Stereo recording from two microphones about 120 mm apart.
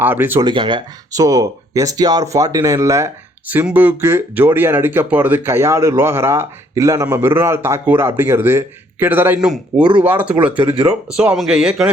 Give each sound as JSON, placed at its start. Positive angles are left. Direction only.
{"t": 0.0, "sound": "speech", "side_deg": -15}
{"t": 0.3, "sound": "speech", "side_deg": -40}
{"t": 1.1, "sound": "speech", "side_deg": -25}
{"t": 3.5, "sound": "speech", "side_deg": -15}
{"t": 10.7, "sound": "speech", "side_deg": -50}
{"t": 11.1, "sound": "a man's voice", "side_deg": -5}